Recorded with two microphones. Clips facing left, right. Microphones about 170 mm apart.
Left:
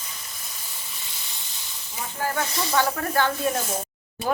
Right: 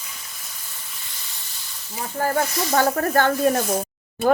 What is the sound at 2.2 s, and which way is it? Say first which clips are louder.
Speech: right 5 dB; 40° right (ahead or behind).